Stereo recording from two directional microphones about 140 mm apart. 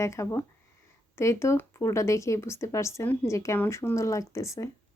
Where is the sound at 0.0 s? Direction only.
20° left (ahead or behind).